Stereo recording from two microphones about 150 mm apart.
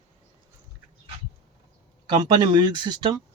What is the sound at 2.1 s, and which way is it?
Speech, 30° right (ahead or behind).